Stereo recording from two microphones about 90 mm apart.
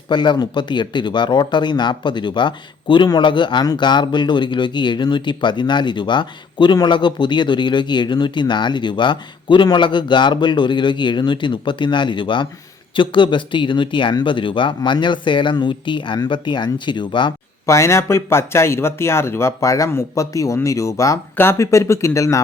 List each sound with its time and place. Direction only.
0.1 s speech: 55° left (ahead or behind)
17.7 s speech: 30° left (ahead or behind)